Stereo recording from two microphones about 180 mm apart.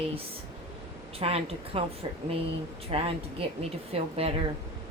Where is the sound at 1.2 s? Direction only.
35° right (ahead or behind).